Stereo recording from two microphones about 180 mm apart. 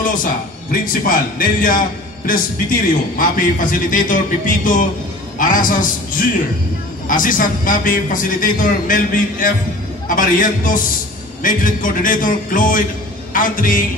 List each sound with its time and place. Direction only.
0.0 s a man's voice: 50° left (ahead or behind)
5.4 s a man's voice: 50° left (ahead or behind)